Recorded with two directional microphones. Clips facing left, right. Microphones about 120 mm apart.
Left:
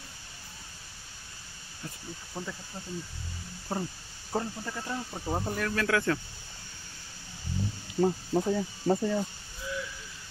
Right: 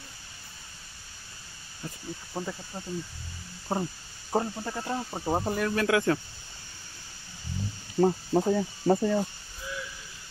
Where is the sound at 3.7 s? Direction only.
25° right (ahead or behind).